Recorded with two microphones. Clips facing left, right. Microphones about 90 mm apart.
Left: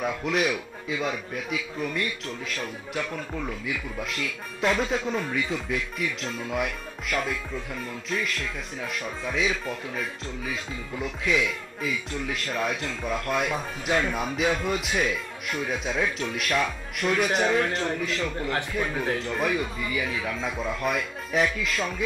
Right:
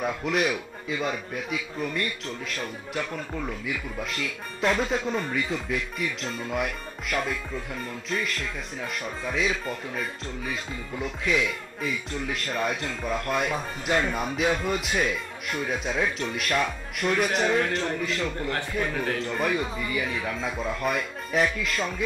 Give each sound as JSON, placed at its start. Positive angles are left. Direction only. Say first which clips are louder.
{"t": 0.0, "sound": "speech", "louder": "even", "side_deg": 0}